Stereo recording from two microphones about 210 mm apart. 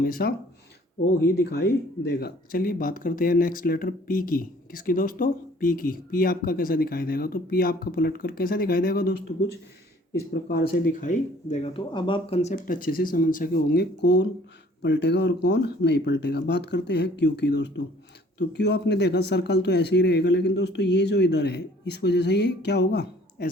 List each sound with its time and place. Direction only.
0.0 s speech: 45° left (ahead or behind)
2.1 s speech: 45° left (ahead or behind)